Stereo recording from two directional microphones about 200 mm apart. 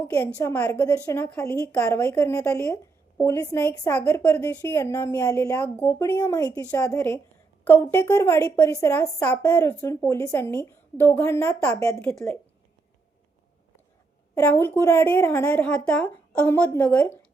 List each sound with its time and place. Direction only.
0.0 s a woman's voice: 10° left (ahead or behind)
14.3 s a woman's voice: 15° left (ahead or behind)